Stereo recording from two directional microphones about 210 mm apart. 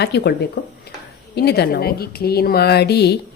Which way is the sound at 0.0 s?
50° left (ahead or behind).